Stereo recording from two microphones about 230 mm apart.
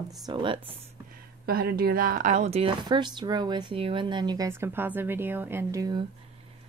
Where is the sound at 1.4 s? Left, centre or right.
Right.